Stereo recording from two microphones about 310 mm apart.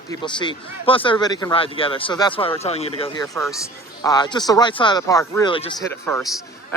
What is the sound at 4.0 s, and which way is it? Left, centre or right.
Speech, centre.